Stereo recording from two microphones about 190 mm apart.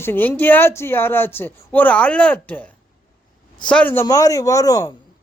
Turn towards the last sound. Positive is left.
turn(degrees=15)  # may be behind; listen again after turning